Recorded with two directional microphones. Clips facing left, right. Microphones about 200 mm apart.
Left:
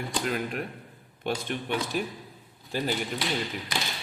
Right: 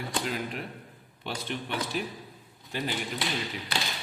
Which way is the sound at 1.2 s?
50° left (ahead or behind).